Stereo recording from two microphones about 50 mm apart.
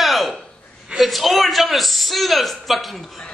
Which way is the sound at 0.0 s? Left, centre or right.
Centre.